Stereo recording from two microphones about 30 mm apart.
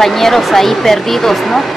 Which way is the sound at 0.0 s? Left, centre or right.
Centre.